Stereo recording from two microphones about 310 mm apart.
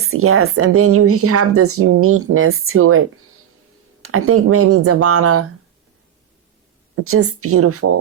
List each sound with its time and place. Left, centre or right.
0.0 s speech: right
7.0 s speech: right